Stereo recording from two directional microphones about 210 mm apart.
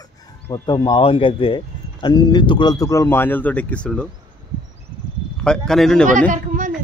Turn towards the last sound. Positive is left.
turn(degrees=-35)  # may be behind; listen again after turning